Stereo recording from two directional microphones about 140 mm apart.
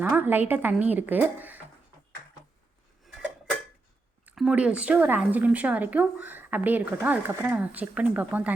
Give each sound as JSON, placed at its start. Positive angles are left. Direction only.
{"t": 0.0, "sound": "speech", "side_deg": -15}
{"t": 4.4, "sound": "speech", "side_deg": -5}